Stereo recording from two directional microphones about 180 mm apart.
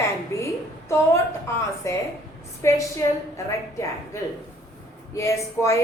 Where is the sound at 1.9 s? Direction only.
15° left (ahead or behind).